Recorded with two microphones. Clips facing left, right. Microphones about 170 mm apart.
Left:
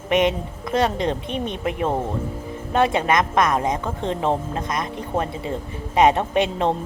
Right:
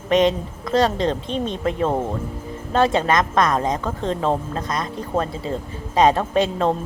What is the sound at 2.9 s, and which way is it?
A woman's voice, 20° left (ahead or behind).